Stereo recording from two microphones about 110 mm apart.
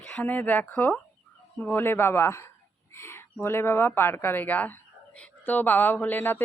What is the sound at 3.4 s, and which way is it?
Speech, 20° left (ahead or behind).